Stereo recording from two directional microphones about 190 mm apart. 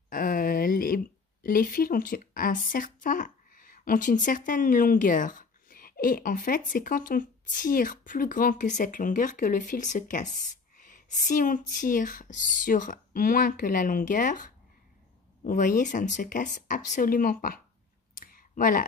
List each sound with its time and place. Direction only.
0.1 s speech: 50° left (ahead or behind)
18.1 s clicking: 50° left (ahead or behind)